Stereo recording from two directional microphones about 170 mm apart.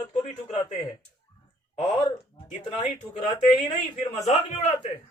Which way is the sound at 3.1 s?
25° left (ahead or behind).